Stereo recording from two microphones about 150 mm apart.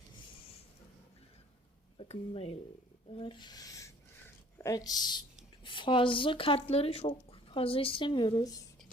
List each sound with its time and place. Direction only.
2.0 s speech: 40° left (ahead or behind); by 8.6 s 25° left (ahead or behind)